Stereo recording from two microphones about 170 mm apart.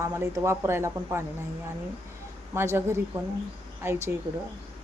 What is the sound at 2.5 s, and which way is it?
Speech, 15° right (ahead or behind).